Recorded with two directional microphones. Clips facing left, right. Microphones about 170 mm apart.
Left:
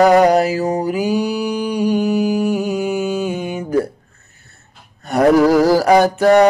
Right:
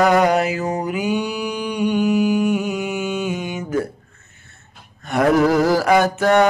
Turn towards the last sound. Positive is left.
turn(degrees=35)  # may be behind; listen again after turning